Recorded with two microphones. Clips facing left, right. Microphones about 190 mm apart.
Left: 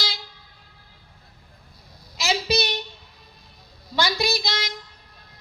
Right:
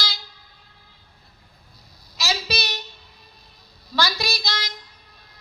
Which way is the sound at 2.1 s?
25° left (ahead or behind).